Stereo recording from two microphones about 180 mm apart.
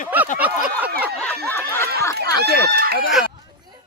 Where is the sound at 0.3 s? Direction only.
10° right (ahead or behind).